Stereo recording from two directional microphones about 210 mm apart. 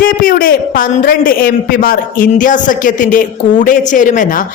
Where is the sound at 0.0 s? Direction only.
40° left (ahead or behind).